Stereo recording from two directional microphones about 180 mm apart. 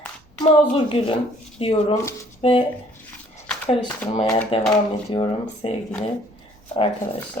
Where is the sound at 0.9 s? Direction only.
30° left (ahead or behind).